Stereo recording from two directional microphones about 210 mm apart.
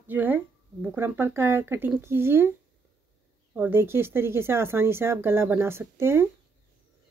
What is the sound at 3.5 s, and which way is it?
Speech, 10° right (ahead or behind).